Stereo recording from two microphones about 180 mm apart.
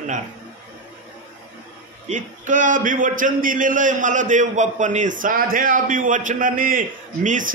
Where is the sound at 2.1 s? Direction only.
45° right (ahead or behind).